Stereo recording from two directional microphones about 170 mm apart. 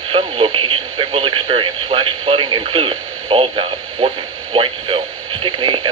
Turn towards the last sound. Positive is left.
turn(degrees=-30)  # may be behind; listen again after turning